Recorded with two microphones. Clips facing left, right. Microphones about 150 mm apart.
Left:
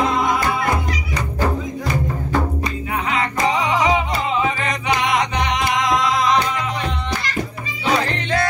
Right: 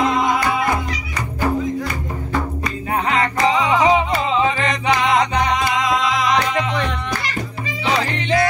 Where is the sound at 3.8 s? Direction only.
30° right (ahead or behind).